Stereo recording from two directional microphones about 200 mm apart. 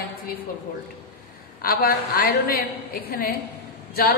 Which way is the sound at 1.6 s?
45° left (ahead or behind).